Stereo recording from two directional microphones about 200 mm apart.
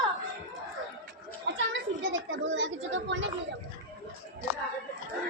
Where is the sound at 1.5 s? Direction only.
70° right (ahead or behind).